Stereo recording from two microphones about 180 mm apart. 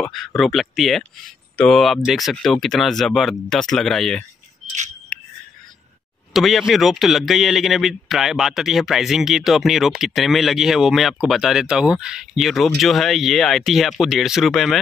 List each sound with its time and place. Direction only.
0.0 s speech: 5° left (ahead or behind)
5.1 s a sound: 5° left (ahead or behind)
6.3 s speech: centre (ahead or behind)